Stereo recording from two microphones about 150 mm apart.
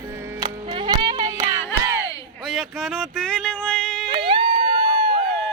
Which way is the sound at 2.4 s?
Centre (ahead or behind).